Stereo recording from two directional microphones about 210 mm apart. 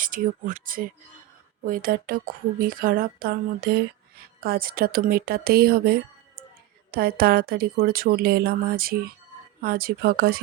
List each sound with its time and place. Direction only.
0.0 s speech: 40° right (ahead or behind)